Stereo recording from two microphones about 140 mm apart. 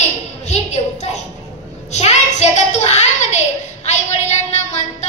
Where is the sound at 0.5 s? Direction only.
55° left (ahead or behind).